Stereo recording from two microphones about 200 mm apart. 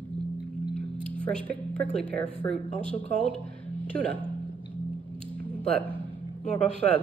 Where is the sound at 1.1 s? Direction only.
5° left (ahead or behind).